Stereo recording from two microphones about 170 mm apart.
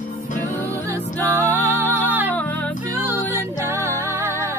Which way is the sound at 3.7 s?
15° right (ahead or behind).